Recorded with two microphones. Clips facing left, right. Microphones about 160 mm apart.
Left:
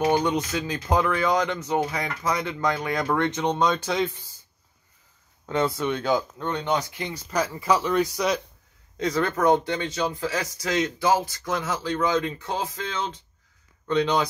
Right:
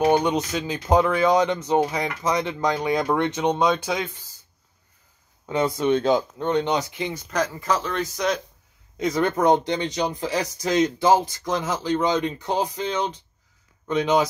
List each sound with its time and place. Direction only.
0.0 s speech: 20° right (ahead or behind)
5.5 s speech: 15° right (ahead or behind)
7.2 s speech: 5° left (ahead or behind)
8.9 s speech: 15° right (ahead or behind)